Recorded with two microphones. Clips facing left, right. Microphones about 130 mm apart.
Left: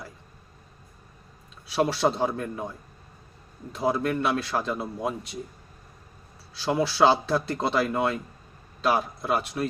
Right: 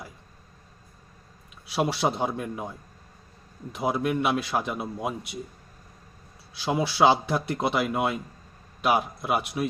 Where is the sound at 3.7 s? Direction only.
15° right (ahead or behind).